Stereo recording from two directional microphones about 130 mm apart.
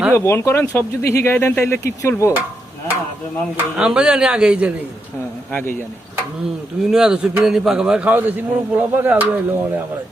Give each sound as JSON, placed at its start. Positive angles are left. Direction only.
{"t": 0.1, "sound": "speech", "side_deg": 20}
{"t": 3.6, "sound": "a man's voice", "side_deg": -10}
{"t": 6.9, "sound": "a man's voice", "side_deg": -5}